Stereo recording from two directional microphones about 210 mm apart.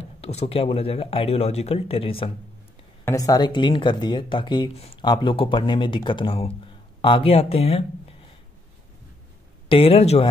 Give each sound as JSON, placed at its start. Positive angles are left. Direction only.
{"t": 0.0, "sound": "speech", "side_deg": 30}
{"t": 3.1, "sound": "speech", "side_deg": 15}
{"t": 9.7, "sound": "speech", "side_deg": 25}